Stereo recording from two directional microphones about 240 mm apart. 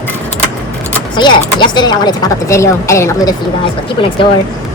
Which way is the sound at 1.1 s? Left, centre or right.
Centre.